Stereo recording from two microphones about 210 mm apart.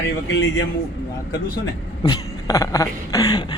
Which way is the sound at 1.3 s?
20° left (ahead or behind).